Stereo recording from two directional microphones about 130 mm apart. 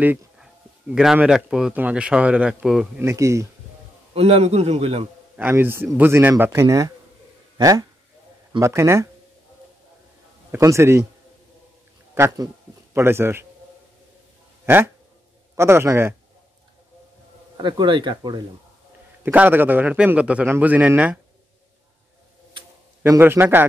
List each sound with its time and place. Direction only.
0.4 s speech: 5° right (ahead or behind)
3.0 s a man's voice: 20° right (ahead or behind)
4.1 s a man's voice: 50° right (ahead or behind)
5.3 s a man's voice: 15° right (ahead or behind)
10.5 s a man's voice: 20° right (ahead or behind)
12.9 s a man's voice: 20° right (ahead or behind)
15.5 s a man's voice: 20° right (ahead or behind)
17.6 s speech: 35° right (ahead or behind)
19.2 s a man's voice: 15° right (ahead or behind)
23.0 s a man's voice: 20° right (ahead or behind)